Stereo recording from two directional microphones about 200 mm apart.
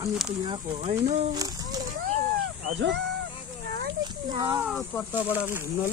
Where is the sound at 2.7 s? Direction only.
60° right (ahead or behind).